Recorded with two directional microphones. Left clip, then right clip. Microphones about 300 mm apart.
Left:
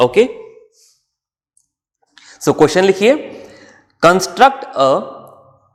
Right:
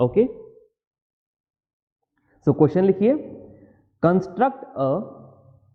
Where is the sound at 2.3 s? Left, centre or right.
Centre.